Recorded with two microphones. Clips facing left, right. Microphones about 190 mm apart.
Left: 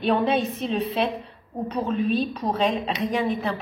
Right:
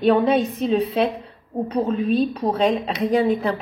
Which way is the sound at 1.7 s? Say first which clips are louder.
Right 3 dB; 35° right (ahead or behind).